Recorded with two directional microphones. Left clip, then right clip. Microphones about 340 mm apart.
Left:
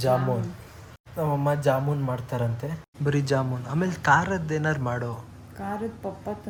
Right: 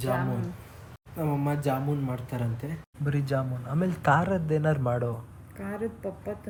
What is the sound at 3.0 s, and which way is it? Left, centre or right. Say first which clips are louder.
Speech: left 5 dB; centre.